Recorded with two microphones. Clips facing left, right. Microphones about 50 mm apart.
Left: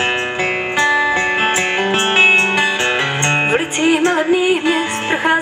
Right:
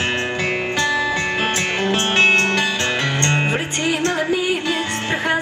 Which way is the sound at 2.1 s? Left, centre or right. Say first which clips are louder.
Left 3 dB; centre.